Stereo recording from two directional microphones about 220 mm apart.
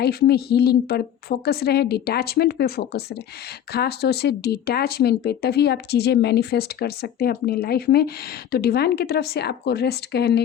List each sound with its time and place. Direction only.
0.0 s speech: 45° left (ahead or behind)